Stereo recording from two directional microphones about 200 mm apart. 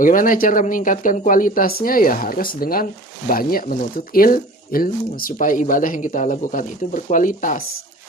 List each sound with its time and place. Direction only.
0.0 s speech: 40° left (ahead or behind)